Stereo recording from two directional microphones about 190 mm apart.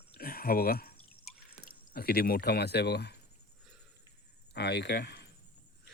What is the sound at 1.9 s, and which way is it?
Speech, 55° left (ahead or behind).